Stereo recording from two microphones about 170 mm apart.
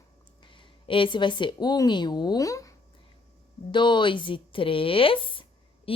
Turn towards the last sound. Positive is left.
turn(degrees=35)  # may be behind; listen again after turning